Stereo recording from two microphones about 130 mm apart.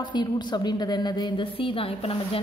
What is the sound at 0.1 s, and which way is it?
A woman's voice, 35° left (ahead or behind).